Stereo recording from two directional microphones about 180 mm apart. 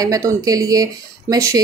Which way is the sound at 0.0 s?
20° right (ahead or behind).